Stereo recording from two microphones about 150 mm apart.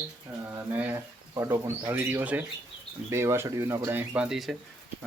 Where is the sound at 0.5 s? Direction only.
10° right (ahead or behind).